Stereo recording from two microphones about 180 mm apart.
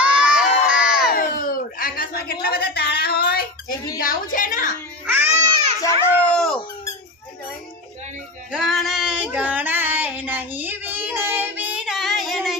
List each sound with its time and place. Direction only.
0.0 s crowd: 5° right (ahead or behind)
1.1 s a sound: 50° left (ahead or behind)
3.9 s a woman's voice: 50° left (ahead or behind)
5.0 s baby cry: 10° right (ahead or behind)
6.1 s baby cry: 5° left (ahead or behind)
8.5 s female singing: centre (ahead or behind)